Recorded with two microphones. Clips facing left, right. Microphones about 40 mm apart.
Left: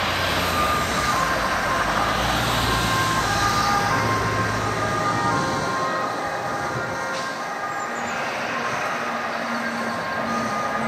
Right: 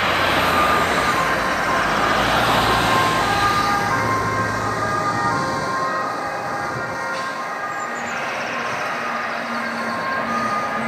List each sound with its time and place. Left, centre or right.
0.0 s vehicle: centre
3.8 s ambulance: centre
5.0 s ambulance: left